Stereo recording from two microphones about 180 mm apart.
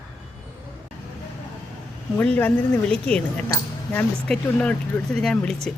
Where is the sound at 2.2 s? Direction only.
10° left (ahead or behind).